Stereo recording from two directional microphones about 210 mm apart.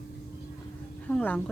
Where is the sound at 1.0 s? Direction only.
5° left (ahead or behind).